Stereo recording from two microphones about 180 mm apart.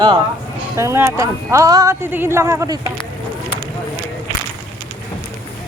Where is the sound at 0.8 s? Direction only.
15° right (ahead or behind).